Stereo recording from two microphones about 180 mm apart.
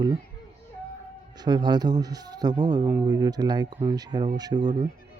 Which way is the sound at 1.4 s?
25° right (ahead or behind).